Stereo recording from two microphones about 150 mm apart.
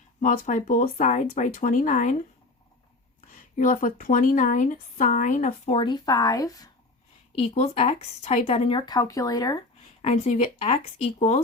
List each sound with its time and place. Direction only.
0.2 s a woman's voice: 60° left (ahead or behind)
3.2 s a woman's voice: 65° left (ahead or behind); by 5.8 s 45° left (ahead or behind)
5.8 s speech: 30° left (ahead or behind)
7.3 s speech: 45° left (ahead or behind)
9.0 s speech: 20° left (ahead or behind)
10.0 s speech: 50° left (ahead or behind)